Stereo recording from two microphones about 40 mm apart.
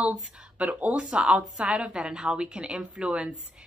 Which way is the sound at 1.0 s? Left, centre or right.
Right.